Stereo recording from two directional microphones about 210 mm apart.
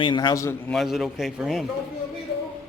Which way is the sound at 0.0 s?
20° left (ahead or behind).